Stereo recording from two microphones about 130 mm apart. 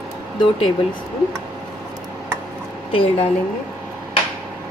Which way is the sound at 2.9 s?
45° left (ahead or behind).